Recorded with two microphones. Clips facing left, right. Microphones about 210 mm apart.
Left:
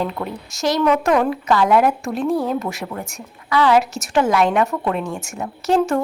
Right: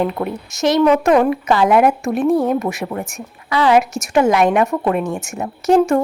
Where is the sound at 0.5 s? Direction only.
20° right (ahead or behind).